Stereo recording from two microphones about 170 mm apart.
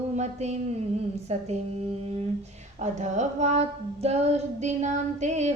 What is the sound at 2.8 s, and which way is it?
Female singing, 45° right (ahead or behind).